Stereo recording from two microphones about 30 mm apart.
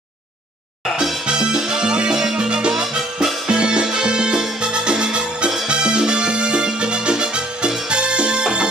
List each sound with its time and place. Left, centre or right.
1.2 s music: right
2.7 s music: centre
3.4 s music: right